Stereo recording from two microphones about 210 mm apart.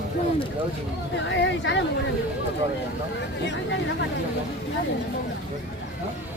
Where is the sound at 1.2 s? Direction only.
60° left (ahead or behind).